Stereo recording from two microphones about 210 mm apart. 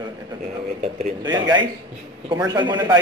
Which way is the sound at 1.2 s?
20° right (ahead or behind).